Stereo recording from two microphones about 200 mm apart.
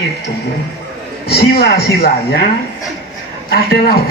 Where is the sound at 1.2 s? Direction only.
50° left (ahead or behind).